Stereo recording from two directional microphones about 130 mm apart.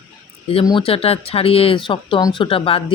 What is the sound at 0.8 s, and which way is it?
Speech, 50° left (ahead or behind).